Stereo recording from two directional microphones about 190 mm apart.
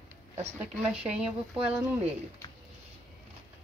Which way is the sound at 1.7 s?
10° right (ahead or behind).